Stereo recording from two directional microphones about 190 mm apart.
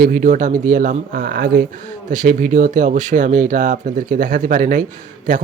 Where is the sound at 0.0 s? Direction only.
45° right (ahead or behind).